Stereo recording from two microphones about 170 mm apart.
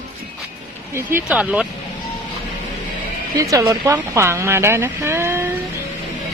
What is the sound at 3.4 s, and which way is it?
Speech, 20° right (ahead or behind).